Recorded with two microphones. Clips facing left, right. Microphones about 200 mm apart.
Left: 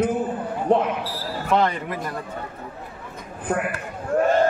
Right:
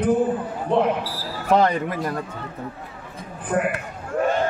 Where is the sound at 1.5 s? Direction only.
40° right (ahead or behind).